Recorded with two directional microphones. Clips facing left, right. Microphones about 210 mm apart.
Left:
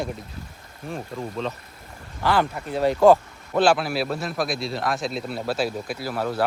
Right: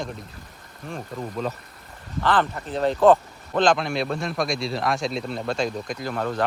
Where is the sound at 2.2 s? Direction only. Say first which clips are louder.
Even; 10° left (ahead or behind).